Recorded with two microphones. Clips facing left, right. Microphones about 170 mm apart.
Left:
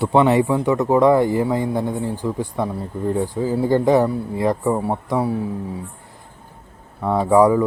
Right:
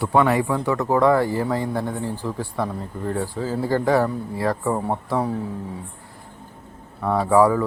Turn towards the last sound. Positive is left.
turn(degrees=20)  # may be behind; listen again after turning